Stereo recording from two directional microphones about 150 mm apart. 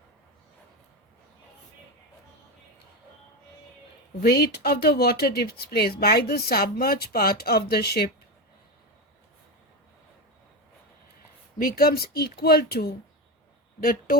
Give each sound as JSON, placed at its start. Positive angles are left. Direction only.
{"t": 4.2, "sound": "speech", "side_deg": 90}
{"t": 11.6, "sound": "speech", "side_deg": 80}